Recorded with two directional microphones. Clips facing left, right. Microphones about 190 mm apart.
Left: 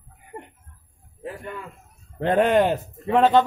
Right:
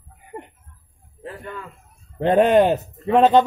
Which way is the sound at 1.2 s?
10° left (ahead or behind).